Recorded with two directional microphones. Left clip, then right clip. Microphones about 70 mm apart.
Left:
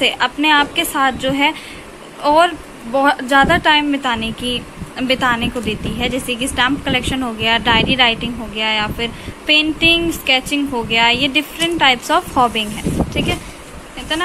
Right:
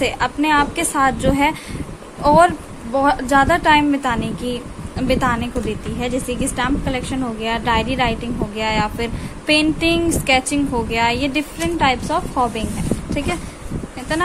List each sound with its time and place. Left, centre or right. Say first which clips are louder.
0.0 s speech: left 4 dB; centre
2.9 s a woman's voice: left 2 dB; centre
8.5 s speech: left 3 dB; right
11.5 s a woman's voice: left 3 dB; centre
13.2 s speech: left 3 dB; right